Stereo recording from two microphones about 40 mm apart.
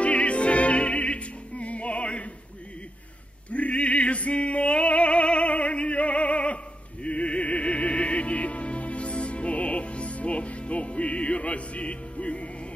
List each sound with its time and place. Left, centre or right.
0.0 s music: left
3.4 s music: left